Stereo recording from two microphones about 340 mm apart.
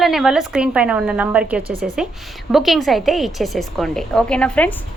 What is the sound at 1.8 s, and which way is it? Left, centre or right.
A woman's voice, centre.